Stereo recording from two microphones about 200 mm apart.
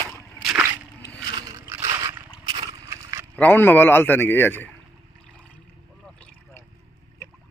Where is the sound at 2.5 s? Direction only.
15° right (ahead or behind).